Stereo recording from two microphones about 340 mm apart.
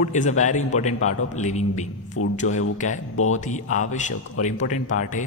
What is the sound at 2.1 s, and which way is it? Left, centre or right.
Speech, left.